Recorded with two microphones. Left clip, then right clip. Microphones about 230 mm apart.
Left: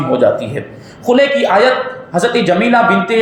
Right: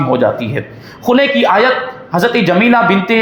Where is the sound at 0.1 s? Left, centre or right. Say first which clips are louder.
Left 3 dB; right.